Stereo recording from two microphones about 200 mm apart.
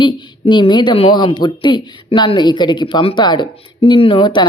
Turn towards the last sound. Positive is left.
turn(degrees=20)  # may be behind; listen again after turning